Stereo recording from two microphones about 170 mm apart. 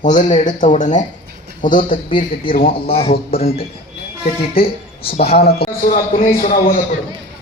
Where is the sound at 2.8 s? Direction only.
35° left (ahead or behind); by 6.6 s 50° left (ahead or behind).